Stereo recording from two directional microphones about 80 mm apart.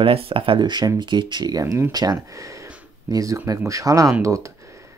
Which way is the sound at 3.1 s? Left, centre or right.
Right.